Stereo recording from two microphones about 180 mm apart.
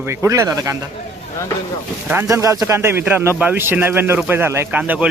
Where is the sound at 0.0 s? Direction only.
15° right (ahead or behind).